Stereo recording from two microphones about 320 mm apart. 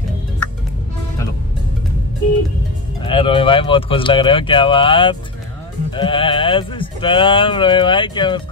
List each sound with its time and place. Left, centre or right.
3.0 s speech: centre